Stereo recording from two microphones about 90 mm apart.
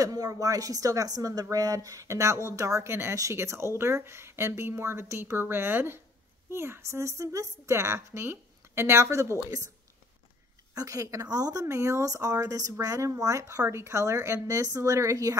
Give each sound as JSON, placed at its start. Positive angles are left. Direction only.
{"t": 0.0, "sound": "a woman's voice", "side_deg": -45}
{"t": 10.7, "sound": "a woman's voice", "side_deg": -40}